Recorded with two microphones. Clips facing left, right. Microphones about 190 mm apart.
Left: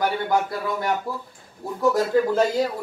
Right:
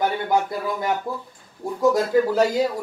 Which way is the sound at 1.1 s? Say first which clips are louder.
Right 1 dB; 20° right (ahead or behind).